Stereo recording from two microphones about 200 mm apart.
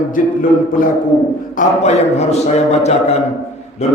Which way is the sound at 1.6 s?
35° left (ahead or behind).